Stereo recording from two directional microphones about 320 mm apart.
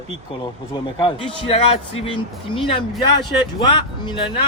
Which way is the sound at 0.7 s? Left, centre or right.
Centre.